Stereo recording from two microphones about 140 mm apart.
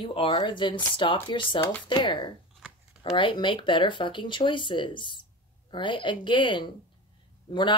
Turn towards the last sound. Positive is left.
turn(degrees=35)  # may be behind; listen again after turning